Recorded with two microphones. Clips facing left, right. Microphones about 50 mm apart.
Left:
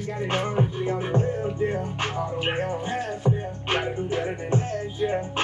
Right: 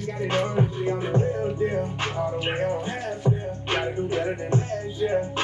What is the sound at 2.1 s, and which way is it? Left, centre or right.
Music, right.